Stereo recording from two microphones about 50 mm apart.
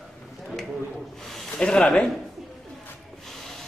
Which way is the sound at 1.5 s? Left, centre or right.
Centre.